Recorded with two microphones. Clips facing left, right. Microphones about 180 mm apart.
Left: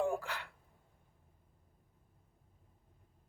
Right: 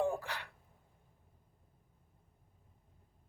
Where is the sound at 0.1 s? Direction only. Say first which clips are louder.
Left 1 dB; 20° right (ahead or behind).